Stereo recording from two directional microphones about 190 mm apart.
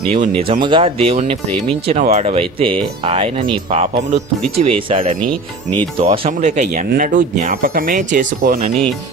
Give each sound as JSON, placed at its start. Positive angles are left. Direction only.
{"t": 0.1, "sound": "speech", "side_deg": -30}